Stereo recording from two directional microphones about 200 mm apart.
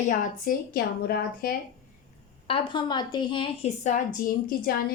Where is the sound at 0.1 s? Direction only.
45° left (ahead or behind).